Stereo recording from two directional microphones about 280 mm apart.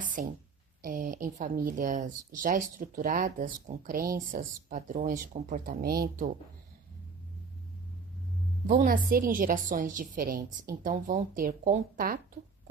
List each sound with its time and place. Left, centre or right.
0.0 s a sound: right
0.8 s a woman's voice: right
8.6 s a woman's voice: right